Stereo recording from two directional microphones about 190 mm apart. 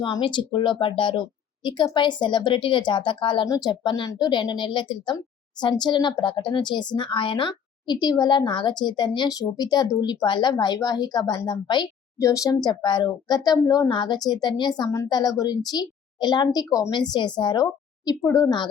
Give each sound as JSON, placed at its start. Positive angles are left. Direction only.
{"t": 0.0, "sound": "a woman's voice", "side_deg": 25}